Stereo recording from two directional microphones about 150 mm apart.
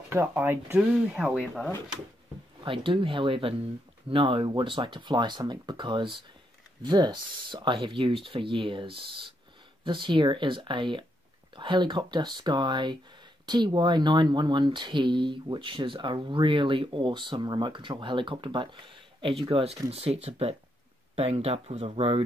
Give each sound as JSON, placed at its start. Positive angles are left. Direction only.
{"t": 0.1, "sound": "speech", "side_deg": -10}
{"t": 2.6, "sound": "speech", "side_deg": -35}